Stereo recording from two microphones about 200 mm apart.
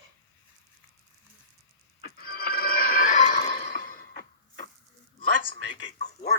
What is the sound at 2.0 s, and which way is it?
Music, 50° left (ahead or behind).